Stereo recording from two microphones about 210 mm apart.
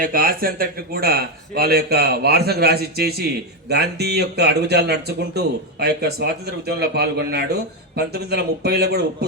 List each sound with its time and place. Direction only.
0.0 s speech: 45° right (ahead or behind)